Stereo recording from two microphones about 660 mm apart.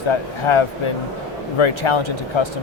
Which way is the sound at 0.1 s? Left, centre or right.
Left.